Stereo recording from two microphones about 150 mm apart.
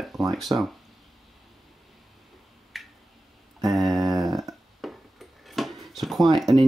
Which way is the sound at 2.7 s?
Centre (ahead or behind).